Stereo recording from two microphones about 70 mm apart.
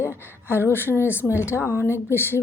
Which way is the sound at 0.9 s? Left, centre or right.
Left.